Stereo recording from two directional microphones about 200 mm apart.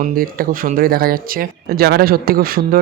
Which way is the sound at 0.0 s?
45° right (ahead or behind).